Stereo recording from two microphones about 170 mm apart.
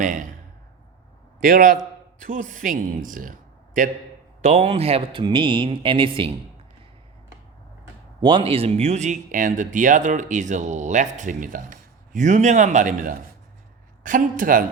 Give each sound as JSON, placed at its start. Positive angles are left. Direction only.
{"t": 0.0, "sound": "speech", "side_deg": -50}
{"t": 1.4, "sound": "speech", "side_deg": -55}
{"t": 4.4, "sound": "speech", "side_deg": -40}
{"t": 8.2, "sound": "speech", "side_deg": -30}